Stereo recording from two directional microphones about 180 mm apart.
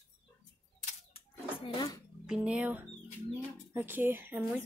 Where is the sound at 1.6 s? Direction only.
25° left (ahead or behind).